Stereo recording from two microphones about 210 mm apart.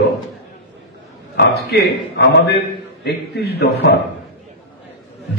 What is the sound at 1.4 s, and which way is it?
A man's voice, 50° left (ahead or behind).